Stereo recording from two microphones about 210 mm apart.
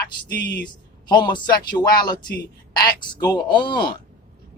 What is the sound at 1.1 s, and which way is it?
Speech, 20° left (ahead or behind).